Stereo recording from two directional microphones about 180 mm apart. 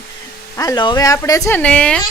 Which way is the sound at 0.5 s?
20° left (ahead or behind).